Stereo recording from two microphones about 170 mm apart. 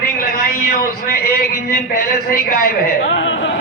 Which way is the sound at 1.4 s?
60° left (ahead or behind).